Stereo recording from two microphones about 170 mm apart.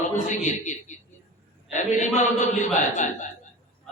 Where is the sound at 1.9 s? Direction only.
45° left (ahead or behind).